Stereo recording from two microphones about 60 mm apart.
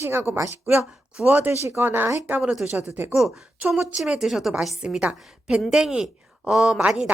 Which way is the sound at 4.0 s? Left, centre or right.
Centre.